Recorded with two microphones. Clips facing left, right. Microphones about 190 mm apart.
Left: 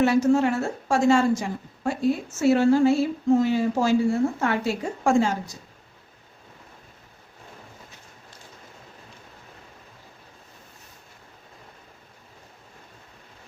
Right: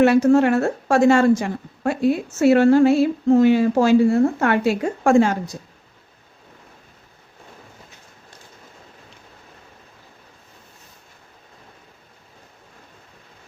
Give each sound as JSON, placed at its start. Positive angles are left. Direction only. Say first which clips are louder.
{"t": 0.0, "sound": "a woman's voice", "louder": "right 5 dB", "side_deg": -65}